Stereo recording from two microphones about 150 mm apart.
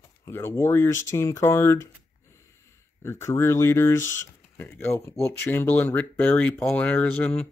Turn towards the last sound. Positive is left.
turn(degrees=10)  # may be behind; listen again after turning